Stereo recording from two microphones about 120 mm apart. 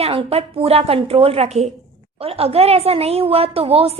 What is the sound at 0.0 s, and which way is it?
A woman's voice, 50° right (ahead or behind).